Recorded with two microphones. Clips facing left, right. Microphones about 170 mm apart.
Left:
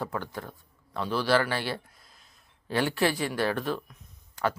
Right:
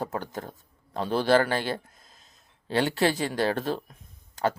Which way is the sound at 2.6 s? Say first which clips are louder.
Right 2 dB; 25° right (ahead or behind).